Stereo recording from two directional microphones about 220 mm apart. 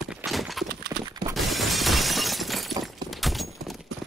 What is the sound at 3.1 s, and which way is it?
Clip-clop, centre (ahead or behind).